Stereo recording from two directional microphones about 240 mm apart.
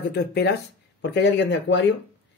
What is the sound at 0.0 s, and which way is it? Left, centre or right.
Speech, left.